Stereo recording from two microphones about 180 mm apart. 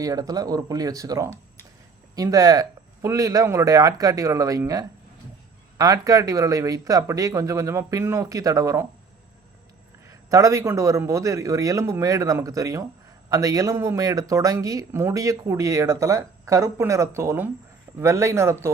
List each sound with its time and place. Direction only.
0.0 s speech: 20° right (ahead or behind)
10.1 s speech: 20° right (ahead or behind)